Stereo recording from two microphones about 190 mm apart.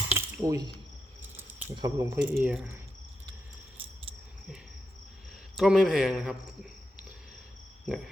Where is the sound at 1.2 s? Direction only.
10° right (ahead or behind).